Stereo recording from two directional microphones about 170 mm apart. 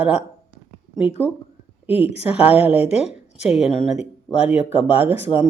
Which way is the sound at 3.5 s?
5° right (ahead or behind).